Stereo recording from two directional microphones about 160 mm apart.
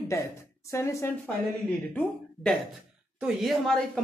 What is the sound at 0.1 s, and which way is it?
Speech, 20° left (ahead or behind).